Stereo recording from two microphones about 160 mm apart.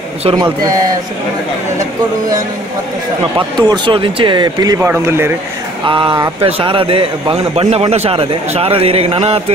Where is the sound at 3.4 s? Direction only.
25° right (ahead or behind).